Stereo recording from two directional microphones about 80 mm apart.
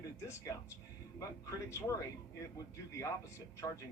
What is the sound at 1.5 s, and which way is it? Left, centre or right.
Speech, left.